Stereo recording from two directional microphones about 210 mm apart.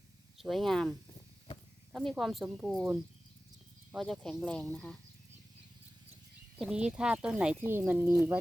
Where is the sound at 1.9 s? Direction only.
Centre (ahead or behind).